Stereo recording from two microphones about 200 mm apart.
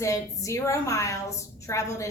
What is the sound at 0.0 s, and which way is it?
A woman's voice, 15° left (ahead or behind).